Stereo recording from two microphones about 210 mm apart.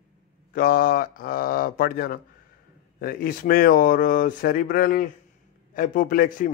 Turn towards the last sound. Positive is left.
turn(degrees=40)  # may be behind; listen again after turning